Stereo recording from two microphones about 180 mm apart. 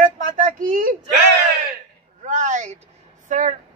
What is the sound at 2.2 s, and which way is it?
A man's voice, 45° right (ahead or behind).